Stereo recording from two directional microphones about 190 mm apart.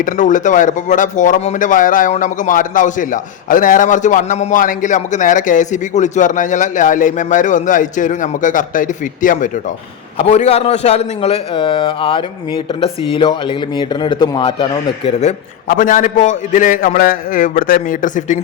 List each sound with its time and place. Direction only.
0.0 s speech: 40° left (ahead or behind)
10.2 s a man's voice: 30° left (ahead or behind)